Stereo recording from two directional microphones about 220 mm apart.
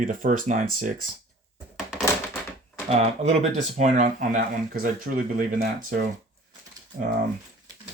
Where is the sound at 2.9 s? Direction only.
30° right (ahead or behind).